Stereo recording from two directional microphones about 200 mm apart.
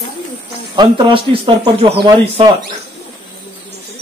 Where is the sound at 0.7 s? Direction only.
25° right (ahead or behind).